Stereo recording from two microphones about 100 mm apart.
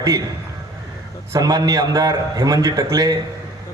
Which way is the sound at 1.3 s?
40° right (ahead or behind).